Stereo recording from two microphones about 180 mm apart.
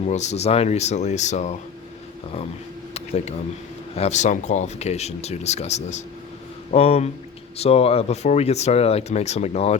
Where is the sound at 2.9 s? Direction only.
35° left (ahead or behind).